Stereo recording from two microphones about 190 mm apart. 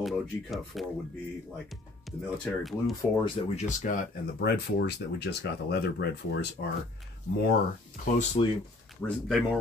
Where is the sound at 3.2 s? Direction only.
35° left (ahead or behind).